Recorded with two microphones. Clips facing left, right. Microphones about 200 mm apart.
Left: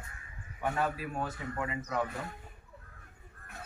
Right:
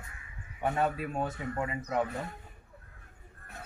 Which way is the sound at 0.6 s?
20° right (ahead or behind).